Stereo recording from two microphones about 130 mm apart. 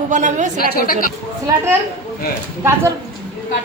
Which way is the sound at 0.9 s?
90° left.